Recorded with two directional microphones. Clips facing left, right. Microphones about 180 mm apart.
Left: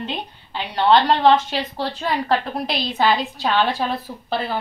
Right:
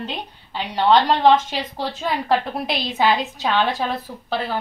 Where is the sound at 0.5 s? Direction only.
15° right (ahead or behind).